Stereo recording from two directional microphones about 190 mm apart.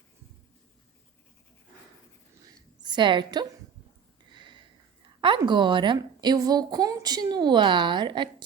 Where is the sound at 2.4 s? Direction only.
25° right (ahead or behind).